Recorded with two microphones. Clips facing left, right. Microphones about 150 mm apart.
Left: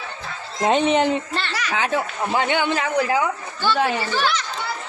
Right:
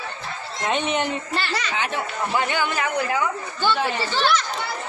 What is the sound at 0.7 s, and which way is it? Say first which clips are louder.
Speech: left 6 dB; 30° left (ahead or behind).